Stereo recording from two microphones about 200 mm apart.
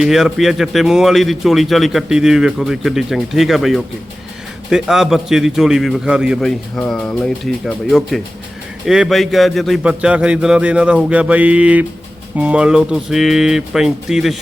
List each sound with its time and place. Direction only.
0.0 s a man's voice: centre (ahead or behind)